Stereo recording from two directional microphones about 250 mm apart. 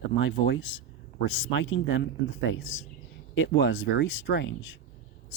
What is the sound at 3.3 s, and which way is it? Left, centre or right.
Speech, left.